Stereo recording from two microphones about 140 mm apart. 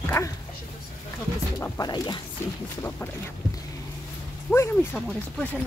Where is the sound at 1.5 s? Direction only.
20° left (ahead or behind).